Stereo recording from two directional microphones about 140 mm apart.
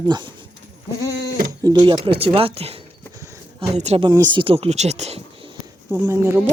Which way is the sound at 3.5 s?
50° right (ahead or behind).